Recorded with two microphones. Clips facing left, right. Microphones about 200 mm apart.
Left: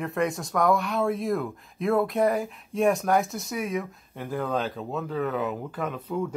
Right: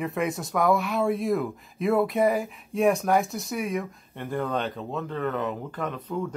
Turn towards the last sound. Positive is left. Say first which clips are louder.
# left 1 dB
turn(degrees=5)  # may be behind; listen again after turning